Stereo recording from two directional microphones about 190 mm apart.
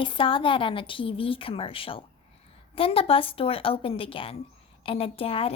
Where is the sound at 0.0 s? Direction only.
25° left (ahead or behind).